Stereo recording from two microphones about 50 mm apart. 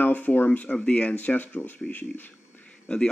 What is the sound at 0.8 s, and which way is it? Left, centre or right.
Speech, left.